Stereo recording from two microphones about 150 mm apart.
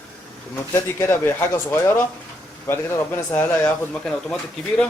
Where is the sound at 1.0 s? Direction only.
15° left (ahead or behind).